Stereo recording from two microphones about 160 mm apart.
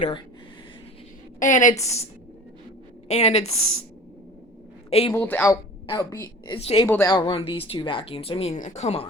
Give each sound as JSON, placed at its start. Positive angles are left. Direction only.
{"t": 1.4, "sound": "a woman's voice", "side_deg": 50}
{"t": 1.8, "sound": "a woman's voice", "side_deg": 40}
{"t": 3.1, "sound": "a woman's voice", "side_deg": 45}
{"t": 4.9, "sound": "a man's voice", "side_deg": 40}
{"t": 5.1, "sound": "speech", "side_deg": 10}
{"t": 5.9, "sound": "a woman's voice", "side_deg": 20}
{"t": 6.6, "sound": "speech", "side_deg": 35}
{"t": 6.8, "sound": "speech", "side_deg": 15}
{"t": 7.1, "sound": "speech", "side_deg": 30}